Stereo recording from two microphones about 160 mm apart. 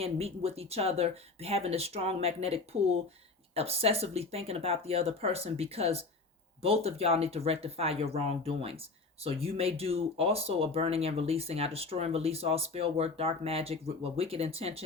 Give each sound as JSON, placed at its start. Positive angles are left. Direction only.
{"t": 0.0, "sound": "speech", "side_deg": -40}